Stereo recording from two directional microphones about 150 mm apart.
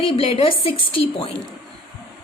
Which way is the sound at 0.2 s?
35° left (ahead or behind).